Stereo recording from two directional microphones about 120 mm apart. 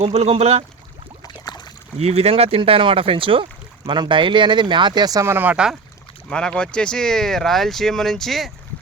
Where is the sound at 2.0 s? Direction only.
60° right (ahead or behind); by 5.3 s 30° right (ahead or behind).